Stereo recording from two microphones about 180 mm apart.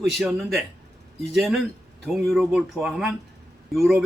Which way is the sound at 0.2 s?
Centre (ahead or behind).